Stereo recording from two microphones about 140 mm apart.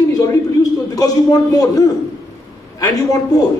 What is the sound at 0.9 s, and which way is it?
Speech, 25° left (ahead or behind).